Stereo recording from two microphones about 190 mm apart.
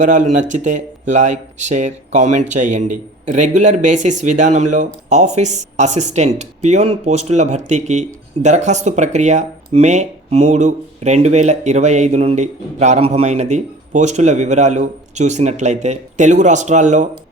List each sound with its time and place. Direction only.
0.0 s speech: 40° right (ahead or behind)